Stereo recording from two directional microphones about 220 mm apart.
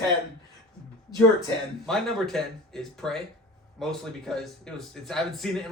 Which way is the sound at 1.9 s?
Centre (ahead or behind).